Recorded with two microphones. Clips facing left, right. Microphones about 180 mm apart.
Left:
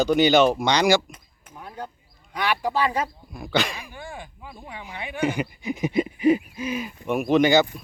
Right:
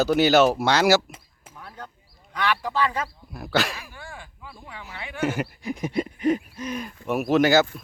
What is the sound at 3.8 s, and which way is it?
Speech, 15° left (ahead or behind).